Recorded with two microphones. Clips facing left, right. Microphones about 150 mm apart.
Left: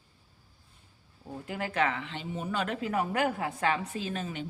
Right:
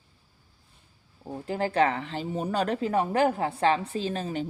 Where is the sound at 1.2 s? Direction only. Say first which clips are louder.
Right 6 dB; 30° right (ahead or behind).